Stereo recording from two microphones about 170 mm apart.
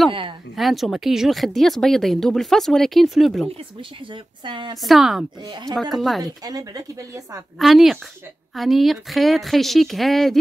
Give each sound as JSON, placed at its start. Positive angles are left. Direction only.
{"t": 0.6, "sound": "speech", "side_deg": 0}
{"t": 4.1, "sound": "a woman's voice", "side_deg": -30}
{"t": 4.8, "sound": "speech", "side_deg": 0}
{"t": 5.4, "sound": "a woman's voice", "side_deg": -25}
{"t": 5.8, "sound": "speech", "side_deg": 0}
{"t": 6.2, "sound": "a woman's voice", "side_deg": -20}
{"t": 7.5, "sound": "speech", "side_deg": 0}